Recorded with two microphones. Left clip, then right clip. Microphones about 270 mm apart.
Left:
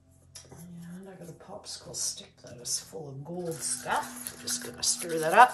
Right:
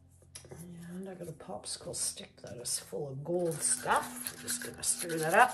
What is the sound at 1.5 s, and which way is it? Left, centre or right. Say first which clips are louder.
Speech: right 1 dB; right.